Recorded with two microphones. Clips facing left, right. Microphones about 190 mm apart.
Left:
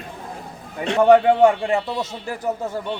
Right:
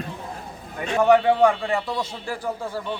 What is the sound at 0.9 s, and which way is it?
A man's voice, 30° left (ahead or behind).